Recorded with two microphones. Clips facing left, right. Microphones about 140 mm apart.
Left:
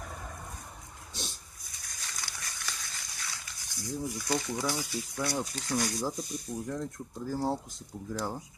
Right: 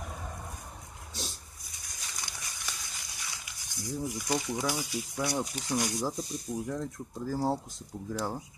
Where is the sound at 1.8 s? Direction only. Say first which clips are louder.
Even; 15° right (ahead or behind).